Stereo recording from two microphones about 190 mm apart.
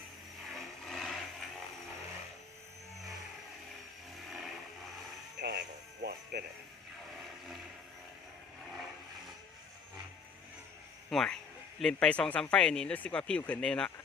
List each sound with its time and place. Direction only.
0.4 s vehicle: centre (ahead or behind)
4.3 s vehicle: centre (ahead or behind)
5.4 s a sound: 60° right (ahead or behind)
11.1 s speech: centre (ahead or behind)